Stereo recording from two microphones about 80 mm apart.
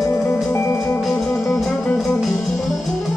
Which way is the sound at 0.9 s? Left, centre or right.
Centre.